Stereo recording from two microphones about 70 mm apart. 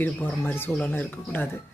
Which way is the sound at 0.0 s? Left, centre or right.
Left.